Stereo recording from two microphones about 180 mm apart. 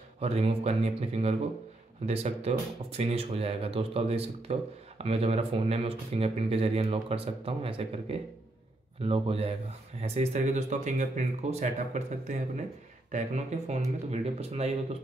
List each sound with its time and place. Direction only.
0.2 s speech: 35° right (ahead or behind)